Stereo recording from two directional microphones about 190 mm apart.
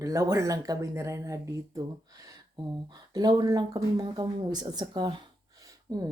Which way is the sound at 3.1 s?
20° right (ahead or behind).